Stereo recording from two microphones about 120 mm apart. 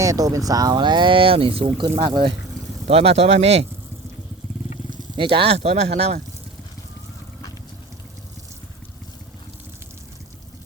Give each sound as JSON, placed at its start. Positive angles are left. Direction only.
{"t": 0.0, "sound": "speech", "side_deg": -30}
{"t": 2.8, "sound": "speech", "side_deg": -55}
{"t": 5.1, "sound": "speech", "side_deg": -45}